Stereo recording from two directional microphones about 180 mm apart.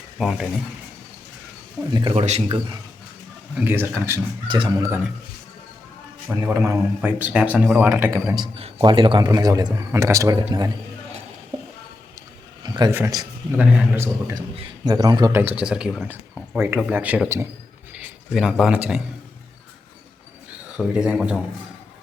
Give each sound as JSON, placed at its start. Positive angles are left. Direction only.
{"t": 0.2, "sound": "speech", "side_deg": 0}
{"t": 1.9, "sound": "a man's voice", "side_deg": -25}
{"t": 2.1, "sound": "a man's voice", "side_deg": -35}
{"t": 3.6, "sound": "speech", "side_deg": -10}
{"t": 4.4, "sound": "a man's voice", "side_deg": -25}
{"t": 4.9, "sound": "speech", "side_deg": -10}
{"t": 6.4, "sound": "speech", "side_deg": -15}
{"t": 8.5, "sound": "a man's voice", "side_deg": -30}
{"t": 12.6, "sound": "a sound", "side_deg": -25}
{"t": 12.9, "sound": "a man's voice", "side_deg": -15}
{"t": 15.4, "sound": "speech", "side_deg": -10}
{"t": 17.9, "sound": "a sound", "side_deg": -5}
{"t": 20.7, "sound": "speech", "side_deg": -5}